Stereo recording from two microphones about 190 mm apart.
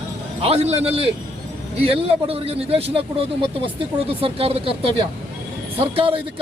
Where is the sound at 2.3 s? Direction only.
30° right (ahead or behind).